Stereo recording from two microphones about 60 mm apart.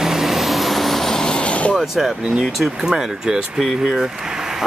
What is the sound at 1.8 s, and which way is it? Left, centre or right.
Speech, centre.